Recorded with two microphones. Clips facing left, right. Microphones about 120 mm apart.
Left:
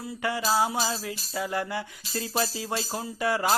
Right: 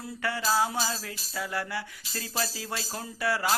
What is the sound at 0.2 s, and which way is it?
Music, 15° left (ahead or behind).